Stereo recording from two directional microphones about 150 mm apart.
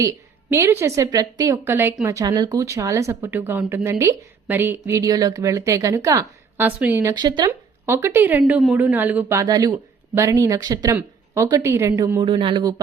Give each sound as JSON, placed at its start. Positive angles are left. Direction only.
{"t": 0.5, "sound": "a woman's voice", "side_deg": -15}
{"t": 6.6, "sound": "a woman's voice", "side_deg": -10}
{"t": 7.1, "sound": "a woman's voice", "side_deg": -30}
{"t": 7.9, "sound": "a woman's voice", "side_deg": -15}
{"t": 9.4, "sound": "a woman's voice", "side_deg": -25}
{"t": 12.2, "sound": "a man's voice", "side_deg": -35}